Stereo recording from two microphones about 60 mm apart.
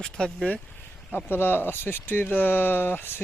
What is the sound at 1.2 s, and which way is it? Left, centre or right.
Speech, left.